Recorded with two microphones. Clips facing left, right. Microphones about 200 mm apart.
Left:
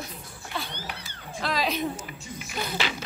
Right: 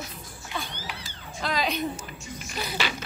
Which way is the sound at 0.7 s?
60° left (ahead or behind).